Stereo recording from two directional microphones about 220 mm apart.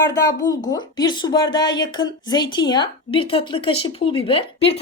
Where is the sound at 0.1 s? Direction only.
15° left (ahead or behind).